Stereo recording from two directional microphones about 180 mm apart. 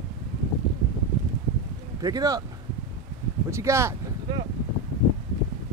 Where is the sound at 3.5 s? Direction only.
15° right (ahead or behind).